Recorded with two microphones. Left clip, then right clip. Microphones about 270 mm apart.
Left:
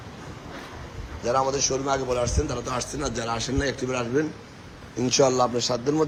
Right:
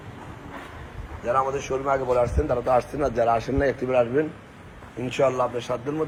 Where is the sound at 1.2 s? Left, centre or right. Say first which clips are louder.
Even; centre.